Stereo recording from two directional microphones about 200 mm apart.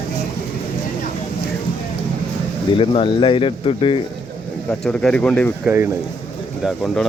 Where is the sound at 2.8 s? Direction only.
25° left (ahead or behind).